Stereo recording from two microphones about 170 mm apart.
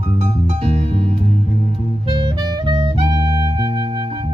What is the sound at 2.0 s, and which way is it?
Music, 25° right (ahead or behind).